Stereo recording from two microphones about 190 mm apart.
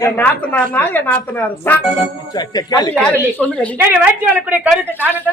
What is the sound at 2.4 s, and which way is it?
Speech, 20° left (ahead or behind).